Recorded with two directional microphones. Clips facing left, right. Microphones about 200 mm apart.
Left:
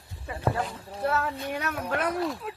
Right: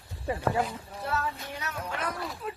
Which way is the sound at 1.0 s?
55° left (ahead or behind).